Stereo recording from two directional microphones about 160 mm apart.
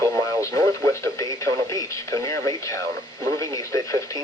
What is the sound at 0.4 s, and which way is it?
Speech, 20° left (ahead or behind).